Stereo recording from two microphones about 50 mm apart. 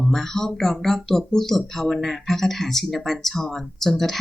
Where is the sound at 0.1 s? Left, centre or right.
Centre.